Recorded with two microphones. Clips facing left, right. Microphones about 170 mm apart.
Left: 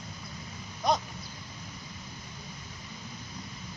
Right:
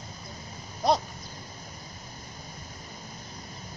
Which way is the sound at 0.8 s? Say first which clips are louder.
Right 3 dB; 35° right (ahead or behind).